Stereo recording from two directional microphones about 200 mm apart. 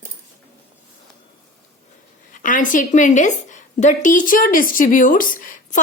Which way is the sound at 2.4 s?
40° left (ahead or behind).